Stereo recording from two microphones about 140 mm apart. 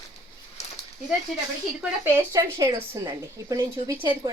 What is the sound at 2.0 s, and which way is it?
A woman's voice, 20° right (ahead or behind).